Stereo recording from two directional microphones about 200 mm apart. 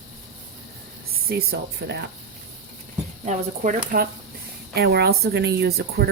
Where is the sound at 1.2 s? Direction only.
50° right (ahead or behind).